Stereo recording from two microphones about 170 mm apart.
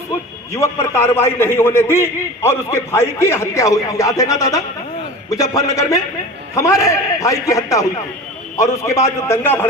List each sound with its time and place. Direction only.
0.5 s a man's voice: 15° left (ahead or behind)